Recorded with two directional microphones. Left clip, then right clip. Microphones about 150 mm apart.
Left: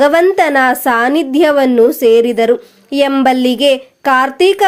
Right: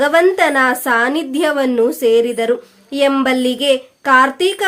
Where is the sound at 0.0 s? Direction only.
35° left (ahead or behind).